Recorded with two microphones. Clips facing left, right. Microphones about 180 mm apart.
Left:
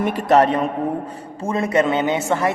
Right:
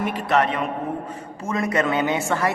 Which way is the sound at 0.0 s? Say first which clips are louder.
Left 5 dB; 45° left (ahead or behind).